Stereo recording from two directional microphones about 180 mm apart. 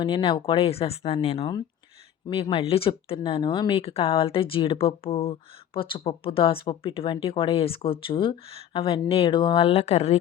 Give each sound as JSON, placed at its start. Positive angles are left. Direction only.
{"t": 0.0, "sound": "speech", "side_deg": 30}